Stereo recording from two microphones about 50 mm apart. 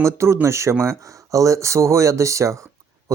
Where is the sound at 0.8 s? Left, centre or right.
Right.